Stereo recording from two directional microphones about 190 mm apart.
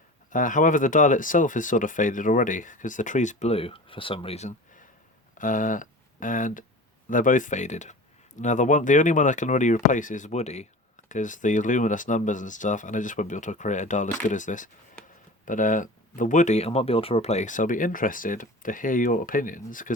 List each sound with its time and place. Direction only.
0.3 s speech: 45° left (ahead or behind)